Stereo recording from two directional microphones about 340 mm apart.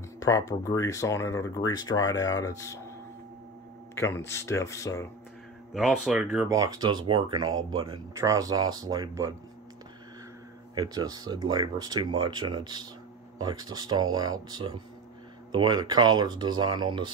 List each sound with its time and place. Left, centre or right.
0.2 s speech: centre
3.9 s speech: centre
10.7 s speech: centre